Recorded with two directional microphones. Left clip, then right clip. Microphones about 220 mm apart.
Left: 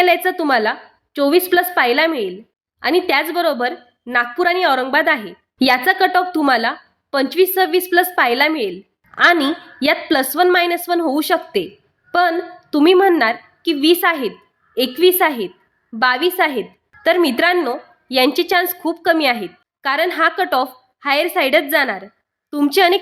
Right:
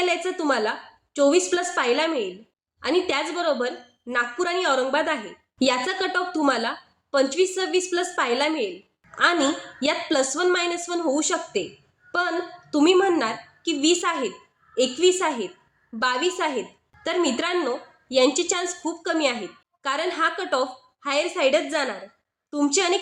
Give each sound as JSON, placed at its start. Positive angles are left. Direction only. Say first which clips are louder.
{"t": 0.0, "sound": "a woman's voice", "louder": "left 9 dB", "side_deg": 45}
{"t": 12.7, "sound": "a woman's voice", "louder": "left 7 dB", "side_deg": 40}